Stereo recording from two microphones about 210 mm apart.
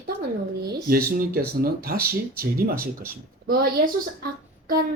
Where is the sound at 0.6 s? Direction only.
45° right (ahead or behind).